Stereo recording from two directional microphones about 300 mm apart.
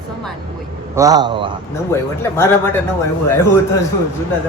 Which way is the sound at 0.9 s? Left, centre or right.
Centre.